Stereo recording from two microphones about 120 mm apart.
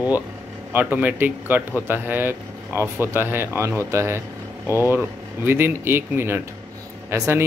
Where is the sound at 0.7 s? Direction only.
15° right (ahead or behind).